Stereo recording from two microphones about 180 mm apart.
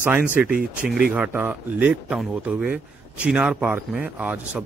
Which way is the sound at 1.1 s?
10° right (ahead or behind).